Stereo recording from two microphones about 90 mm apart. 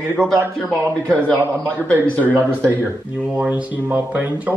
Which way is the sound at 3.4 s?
15° right (ahead or behind).